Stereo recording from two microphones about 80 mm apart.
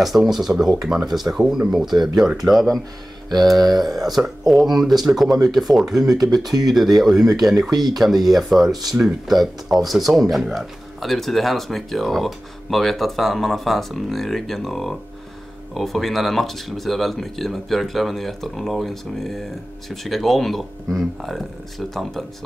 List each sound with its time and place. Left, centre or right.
0.0 s speech: centre